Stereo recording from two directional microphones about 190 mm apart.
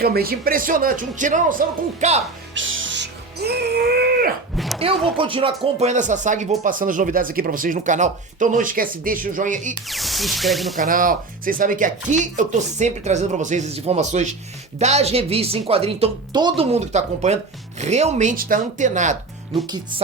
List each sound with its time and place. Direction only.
0.0 s speech: 55° right (ahead or behind); by 2.2 s 35° right (ahead or behind)
2.6 s music: 85° right; by 4.3 s 55° right (ahead or behind)
4.5 s a sound: centre (ahead or behind)
5.1 s speech: 30° right (ahead or behind)
9.9 s speech: centre (ahead or behind)
10.8 s speech: 45° right (ahead or behind); by 16.6 s 25° right (ahead or behind)
16.7 s speech: 35° right (ahead or behind)
19.6 s speech: 20° right (ahead or behind)